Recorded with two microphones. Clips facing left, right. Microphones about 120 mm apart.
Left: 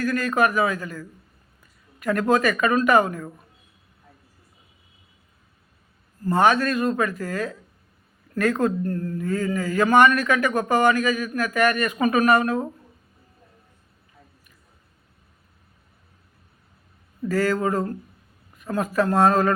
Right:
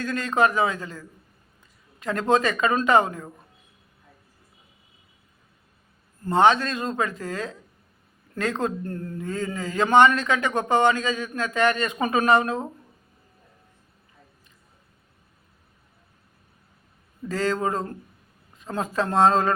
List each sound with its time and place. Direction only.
0.0 s a man's voice: 25° right (ahead or behind)
6.2 s a man's voice: 20° right (ahead or behind)
17.2 s a man's voice: 20° right (ahead or behind)